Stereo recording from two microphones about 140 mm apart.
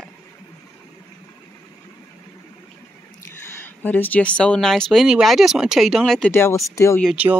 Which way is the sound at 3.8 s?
10° left (ahead or behind).